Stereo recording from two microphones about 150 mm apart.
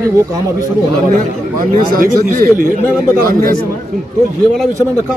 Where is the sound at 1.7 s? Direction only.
65° right (ahead or behind).